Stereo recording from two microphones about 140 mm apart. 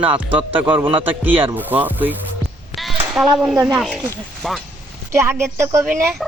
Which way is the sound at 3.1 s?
5° right (ahead or behind).